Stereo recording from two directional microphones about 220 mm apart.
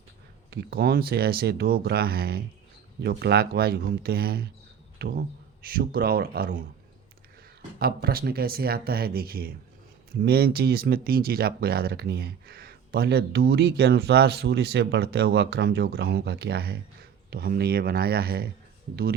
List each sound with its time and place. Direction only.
0.5 s speech: 45° right (ahead or behind)
7.8 s speech: 45° right (ahead or behind)